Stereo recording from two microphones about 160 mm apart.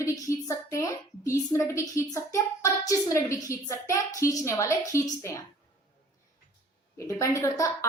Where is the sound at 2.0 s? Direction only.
20° left (ahead or behind).